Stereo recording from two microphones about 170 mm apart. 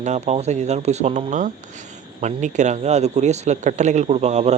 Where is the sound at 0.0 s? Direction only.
40° right (ahead or behind).